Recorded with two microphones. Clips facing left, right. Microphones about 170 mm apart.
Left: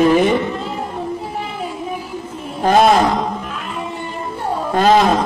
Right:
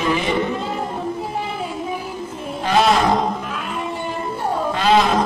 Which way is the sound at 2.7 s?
50° left (ahead or behind).